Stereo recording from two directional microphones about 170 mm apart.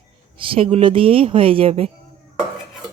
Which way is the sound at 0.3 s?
30° right (ahead or behind).